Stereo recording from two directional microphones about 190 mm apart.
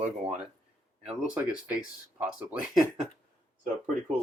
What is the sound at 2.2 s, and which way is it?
Speech, 5° right (ahead or behind).